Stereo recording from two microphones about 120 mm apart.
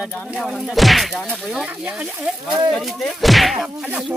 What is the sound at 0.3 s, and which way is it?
Speech, 5° right (ahead or behind).